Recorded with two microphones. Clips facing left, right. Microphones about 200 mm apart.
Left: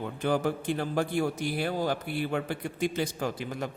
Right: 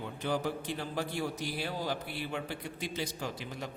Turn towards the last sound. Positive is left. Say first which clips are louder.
# left 7 dB
turn(degrees=50)  # may be behind; listen again after turning